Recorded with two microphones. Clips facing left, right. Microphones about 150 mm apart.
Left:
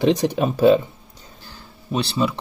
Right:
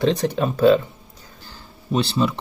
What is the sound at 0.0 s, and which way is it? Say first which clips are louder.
Speech: left 2 dB; 15° left (ahead or behind).